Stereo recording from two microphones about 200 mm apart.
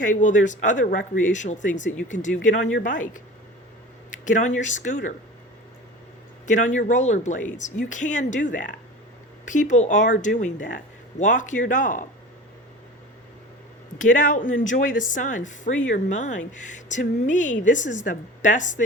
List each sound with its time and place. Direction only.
0.0 s speech: 40° left (ahead or behind)
4.3 s speech: 40° left (ahead or behind)
6.5 s speech: 40° left (ahead or behind)
14.0 s speech: 40° left (ahead or behind)